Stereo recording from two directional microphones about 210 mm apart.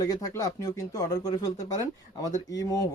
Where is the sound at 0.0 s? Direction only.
15° left (ahead or behind).